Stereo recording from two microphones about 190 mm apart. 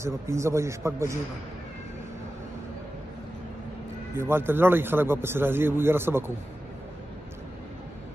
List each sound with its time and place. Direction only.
0.0 s a man's voice: 15° right (ahead or behind)
4.2 s a man's voice: 10° right (ahead or behind)